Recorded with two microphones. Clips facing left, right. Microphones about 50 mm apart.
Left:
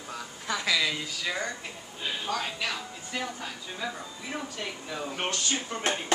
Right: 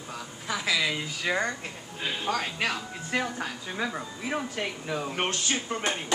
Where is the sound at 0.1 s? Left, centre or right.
Centre.